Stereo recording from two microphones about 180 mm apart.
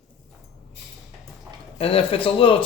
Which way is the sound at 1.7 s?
30° left (ahead or behind).